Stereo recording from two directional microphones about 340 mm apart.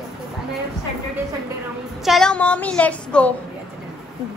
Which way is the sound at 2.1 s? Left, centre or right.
Centre.